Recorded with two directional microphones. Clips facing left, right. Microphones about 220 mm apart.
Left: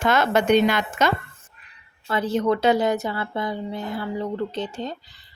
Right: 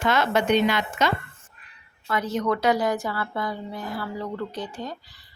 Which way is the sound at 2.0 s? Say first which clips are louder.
Left 3 dB; 30° left (ahead or behind).